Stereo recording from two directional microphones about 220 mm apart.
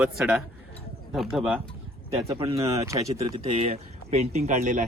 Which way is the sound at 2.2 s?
25° right (ahead or behind).